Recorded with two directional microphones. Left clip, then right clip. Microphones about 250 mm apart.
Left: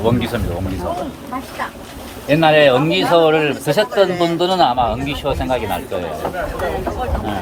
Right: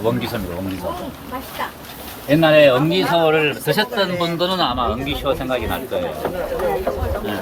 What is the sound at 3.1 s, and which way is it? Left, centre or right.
Speech, left.